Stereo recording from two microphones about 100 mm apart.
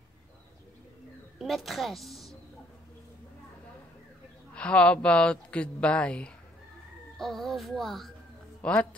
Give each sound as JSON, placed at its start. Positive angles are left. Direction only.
{"t": 1.4, "sound": "a woman's voice", "side_deg": 0}
{"t": 4.6, "sound": "a child's voice", "side_deg": 10}